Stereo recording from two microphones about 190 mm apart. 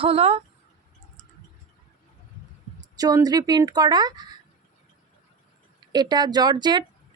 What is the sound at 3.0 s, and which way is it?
A woman's voice, 20° right (ahead or behind).